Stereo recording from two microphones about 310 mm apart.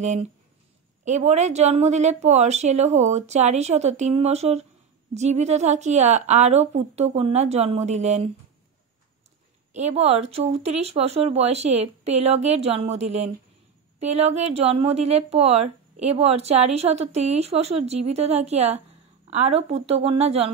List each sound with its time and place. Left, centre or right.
0.0 s a woman's voice: right
9.7 s a woman's voice: right